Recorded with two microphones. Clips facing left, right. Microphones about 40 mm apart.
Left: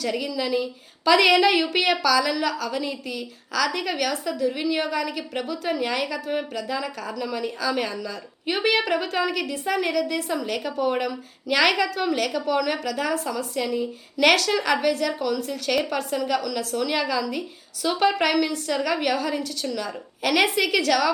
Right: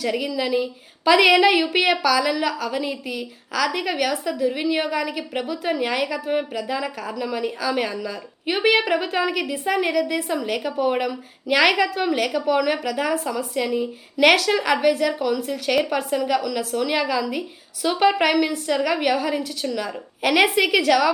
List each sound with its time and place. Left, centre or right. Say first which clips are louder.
0.0 s a woman's voice: right 3 dB; centre